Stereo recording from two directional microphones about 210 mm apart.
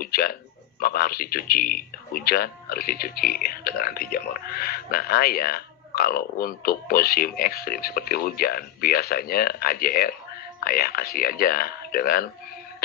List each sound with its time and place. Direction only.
0.0 s a man's voice: 45° left (ahead or behind)